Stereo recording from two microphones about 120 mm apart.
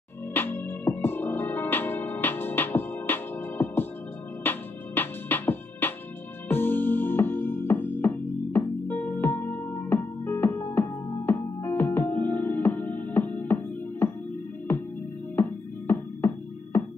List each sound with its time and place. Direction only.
0.3 s music: 15° left (ahead or behind)